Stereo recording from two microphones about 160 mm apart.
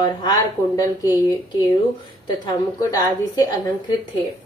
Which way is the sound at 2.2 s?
25° left (ahead or behind).